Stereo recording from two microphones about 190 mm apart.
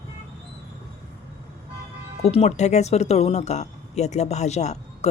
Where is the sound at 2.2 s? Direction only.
35° left (ahead or behind).